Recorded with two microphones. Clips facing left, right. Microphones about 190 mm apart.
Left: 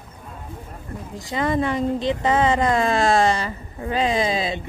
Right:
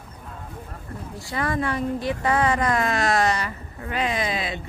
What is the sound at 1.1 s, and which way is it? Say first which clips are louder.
Speech: left 4 dB; 20° left (ahead or behind).